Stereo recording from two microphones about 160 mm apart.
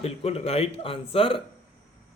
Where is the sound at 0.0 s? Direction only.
40° left (ahead or behind).